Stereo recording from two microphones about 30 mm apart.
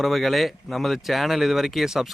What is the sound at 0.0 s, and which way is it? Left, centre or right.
Speech, centre.